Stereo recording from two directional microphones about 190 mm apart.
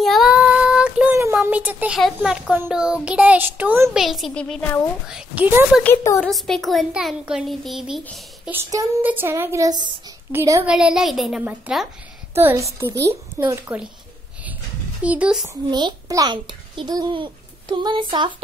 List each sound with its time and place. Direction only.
0.0 s child singing: centre (ahead or behind)
2.1 s a child's voice: 5° right (ahead or behind)
5.0 s a child's voice: 5° right (ahead or behind)
6.1 s speech: centre (ahead or behind)
8.6 s a child's voice: 15° right (ahead or behind)
10.7 s a child's voice: 5° right (ahead or behind)
15.0 s a child's voice: 5° right (ahead or behind)
15.4 s a child's voice: 20° right (ahead or behind)